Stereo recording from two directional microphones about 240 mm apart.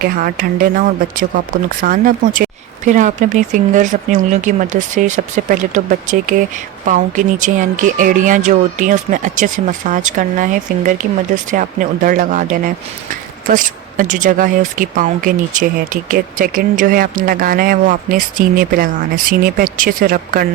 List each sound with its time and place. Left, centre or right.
0.0 s speech: right
1.8 s speech: right